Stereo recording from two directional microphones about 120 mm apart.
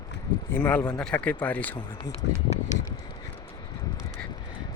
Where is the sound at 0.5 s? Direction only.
15° left (ahead or behind).